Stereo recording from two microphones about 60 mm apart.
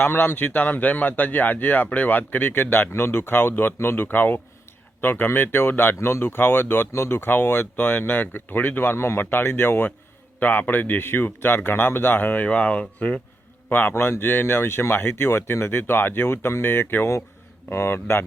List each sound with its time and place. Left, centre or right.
0.0 s speech: left; by 13.2 s centre
13.7 s a man's voice: left